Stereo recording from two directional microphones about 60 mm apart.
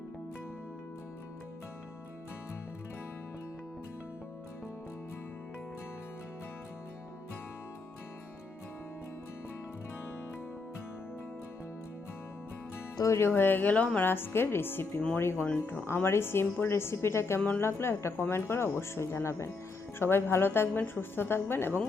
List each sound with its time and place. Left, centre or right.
13.1 s a woman's voice: left
14.0 s a woman's voice: left